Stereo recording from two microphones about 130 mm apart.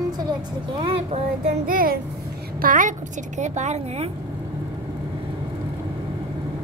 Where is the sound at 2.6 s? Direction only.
90° right; by 4.1 s 60° right (ahead or behind).